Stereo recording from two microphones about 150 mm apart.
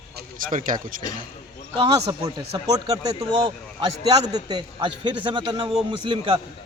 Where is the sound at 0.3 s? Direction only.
65° right (ahead or behind).